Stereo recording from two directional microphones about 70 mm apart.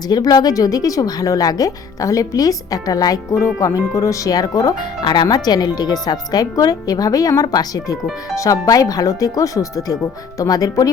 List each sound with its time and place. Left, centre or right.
0.1 s speech: left
3.3 s speech: left
8.4 s speech: left